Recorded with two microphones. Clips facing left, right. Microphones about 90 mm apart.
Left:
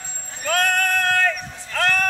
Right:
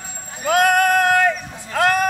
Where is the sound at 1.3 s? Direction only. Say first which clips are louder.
Right 4 dB; 15° right (ahead or behind).